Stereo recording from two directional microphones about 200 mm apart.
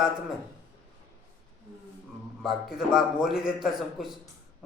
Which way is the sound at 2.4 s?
Centre (ahead or behind).